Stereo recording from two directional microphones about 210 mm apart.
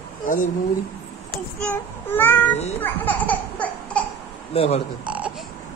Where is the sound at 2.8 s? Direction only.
10° left (ahead or behind).